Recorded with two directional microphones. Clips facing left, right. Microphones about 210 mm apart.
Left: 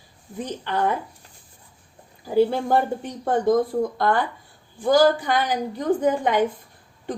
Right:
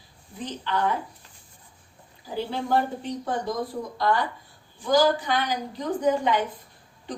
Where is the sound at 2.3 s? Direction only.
50° left (ahead or behind).